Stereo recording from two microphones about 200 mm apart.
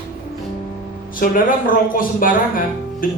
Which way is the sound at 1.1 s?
45° left (ahead or behind).